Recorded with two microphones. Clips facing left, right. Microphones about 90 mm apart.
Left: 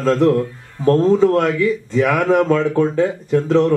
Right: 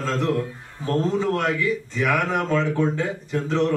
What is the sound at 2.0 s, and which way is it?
Speech, 60° left (ahead or behind).